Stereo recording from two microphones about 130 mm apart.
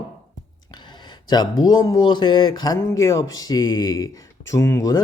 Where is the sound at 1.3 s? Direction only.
30° left (ahead or behind).